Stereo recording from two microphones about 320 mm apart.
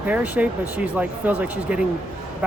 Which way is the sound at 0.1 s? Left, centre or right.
Centre.